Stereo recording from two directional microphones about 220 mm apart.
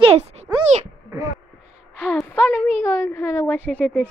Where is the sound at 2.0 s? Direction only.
5° left (ahead or behind).